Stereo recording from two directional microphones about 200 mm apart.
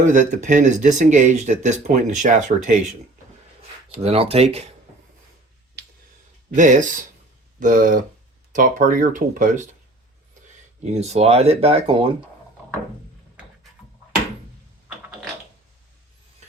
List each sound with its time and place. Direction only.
0.1 s speech: 40° right (ahead or behind)
3.8 s speech: 30° right (ahead or behind)
6.6 s speech: 40° right (ahead or behind)
11.0 s speech: 30° right (ahead or behind)
14.8 s a sound: 5° right (ahead or behind)
16.4 s vehicle: 35° right (ahead or behind)